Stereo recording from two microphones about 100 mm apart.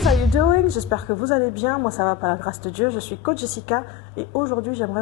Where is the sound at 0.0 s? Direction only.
Centre (ahead or behind).